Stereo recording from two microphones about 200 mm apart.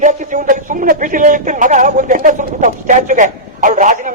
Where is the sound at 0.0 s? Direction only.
40° right (ahead or behind).